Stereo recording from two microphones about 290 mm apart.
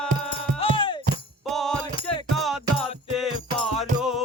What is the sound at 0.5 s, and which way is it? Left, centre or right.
Music, centre.